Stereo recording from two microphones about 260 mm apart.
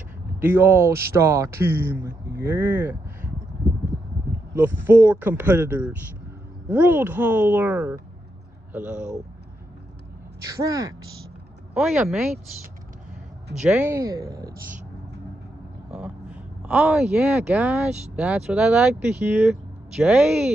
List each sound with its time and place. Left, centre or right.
0.4 s speech: centre
10.5 s speech: centre
11.7 s speech: centre
13.6 s speech: centre
16.6 s speech: centre